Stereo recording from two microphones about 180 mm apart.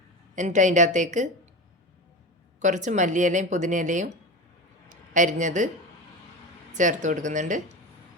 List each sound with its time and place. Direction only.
0.3 s speech: 45° right (ahead or behind)
2.6 s speech: 40° right (ahead or behind)
5.1 s speech: 45° right (ahead or behind)
6.7 s speech: 45° right (ahead or behind)